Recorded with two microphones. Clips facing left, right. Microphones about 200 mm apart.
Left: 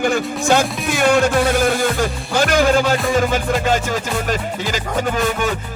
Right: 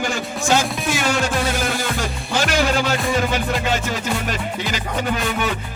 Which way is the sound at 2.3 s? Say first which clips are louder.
Left 4 dB; 50° left (ahead or behind).